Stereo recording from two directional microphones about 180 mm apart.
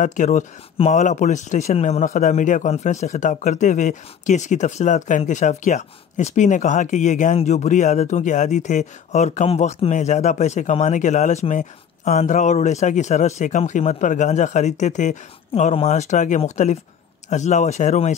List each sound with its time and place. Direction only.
0.0 s speech: 45° left (ahead or behind)